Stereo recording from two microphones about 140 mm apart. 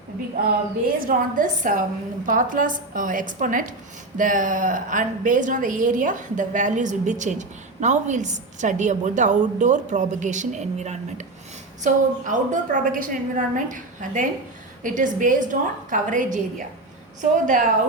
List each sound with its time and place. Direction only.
0.9 s a woman's voice: 80° right; by 17.6 s 65° right (ahead or behind)